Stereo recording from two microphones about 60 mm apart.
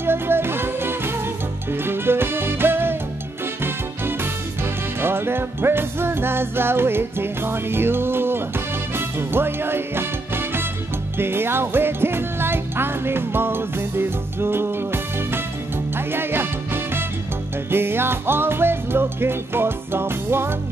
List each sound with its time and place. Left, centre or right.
0.0 s music: right